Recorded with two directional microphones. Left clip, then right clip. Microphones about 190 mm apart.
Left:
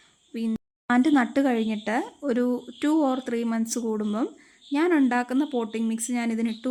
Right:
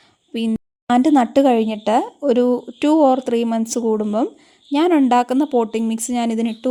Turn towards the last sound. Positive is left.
turn(degrees=-30)  # may be behind; listen again after turning